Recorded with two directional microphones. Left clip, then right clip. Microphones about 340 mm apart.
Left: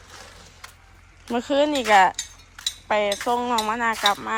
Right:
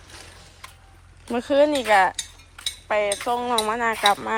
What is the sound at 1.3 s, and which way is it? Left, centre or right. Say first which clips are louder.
Speech: right 2 dB; centre.